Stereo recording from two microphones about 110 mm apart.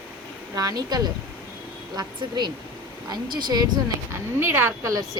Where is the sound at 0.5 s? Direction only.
35° right (ahead or behind).